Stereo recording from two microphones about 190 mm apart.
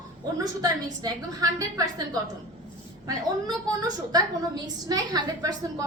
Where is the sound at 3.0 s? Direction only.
20° right (ahead or behind).